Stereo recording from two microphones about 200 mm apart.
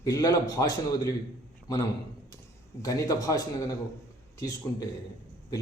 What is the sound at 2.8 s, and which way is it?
Speech, 15° left (ahead or behind).